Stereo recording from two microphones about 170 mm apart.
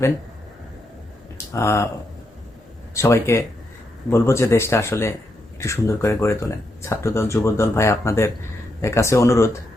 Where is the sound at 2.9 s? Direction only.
15° left (ahead or behind).